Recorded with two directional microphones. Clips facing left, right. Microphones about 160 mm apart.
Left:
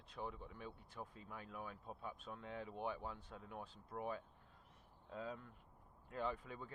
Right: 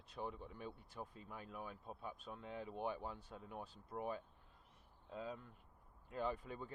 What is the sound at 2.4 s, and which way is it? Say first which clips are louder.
Speech: right 1 dB; 25° right (ahead or behind).